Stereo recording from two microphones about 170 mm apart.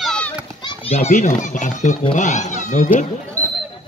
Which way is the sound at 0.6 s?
25° left (ahead or behind).